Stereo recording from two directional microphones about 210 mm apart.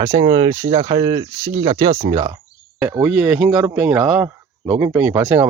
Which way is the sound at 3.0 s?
5° right (ahead or behind).